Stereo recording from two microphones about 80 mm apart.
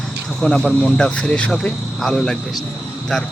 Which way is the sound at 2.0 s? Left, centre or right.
Centre.